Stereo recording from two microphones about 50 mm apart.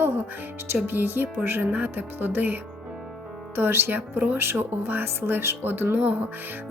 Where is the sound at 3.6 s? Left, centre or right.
Right.